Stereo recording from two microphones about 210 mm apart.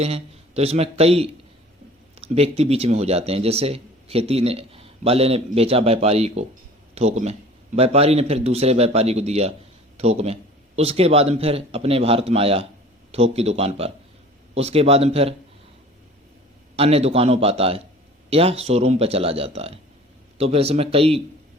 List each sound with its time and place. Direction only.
0.0 s a man's voice: 30° right (ahead or behind)
16.7 s speech: 30° right (ahead or behind)